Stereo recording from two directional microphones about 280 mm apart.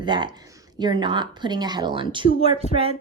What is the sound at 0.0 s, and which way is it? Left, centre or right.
Speech, centre.